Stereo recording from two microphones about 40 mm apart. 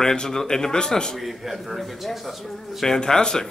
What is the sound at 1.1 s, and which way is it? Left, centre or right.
A man's voice, centre.